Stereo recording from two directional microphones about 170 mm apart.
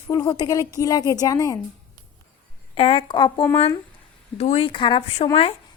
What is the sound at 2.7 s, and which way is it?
A woman's voice, 30° left (ahead or behind).